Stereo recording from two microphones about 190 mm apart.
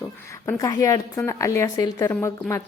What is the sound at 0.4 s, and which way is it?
A woman's voice, 15° left (ahead or behind).